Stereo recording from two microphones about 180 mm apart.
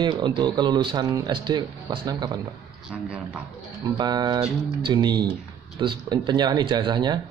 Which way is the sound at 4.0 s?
25° right (ahead or behind).